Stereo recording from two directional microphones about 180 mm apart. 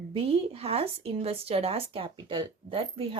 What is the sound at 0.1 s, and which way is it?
Speech, 30° right (ahead or behind).